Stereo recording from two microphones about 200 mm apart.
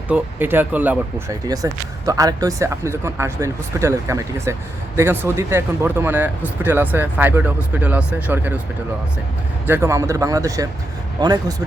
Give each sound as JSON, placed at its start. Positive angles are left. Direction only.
{"t": 0.1, "sound": "speech", "side_deg": -10}
{"t": 9.6, "sound": "speech", "side_deg": -10}